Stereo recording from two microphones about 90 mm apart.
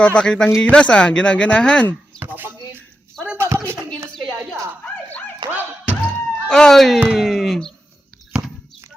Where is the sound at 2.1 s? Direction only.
20° right (ahead or behind).